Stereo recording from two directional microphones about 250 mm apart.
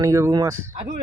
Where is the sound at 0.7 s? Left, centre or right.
Right.